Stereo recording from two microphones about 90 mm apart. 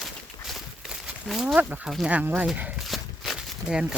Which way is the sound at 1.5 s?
15° right (ahead or behind).